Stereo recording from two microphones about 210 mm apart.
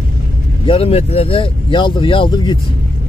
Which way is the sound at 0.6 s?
25° left (ahead or behind).